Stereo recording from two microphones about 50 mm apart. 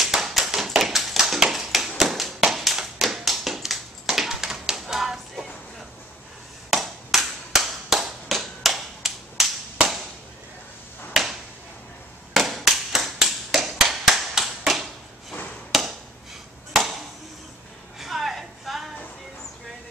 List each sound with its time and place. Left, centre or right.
0.0 s tap: centre
4.0 s a sound: centre
6.7 s tap: centre
12.4 s tap: centre
15.7 s a sound: centre
17.9 s music: centre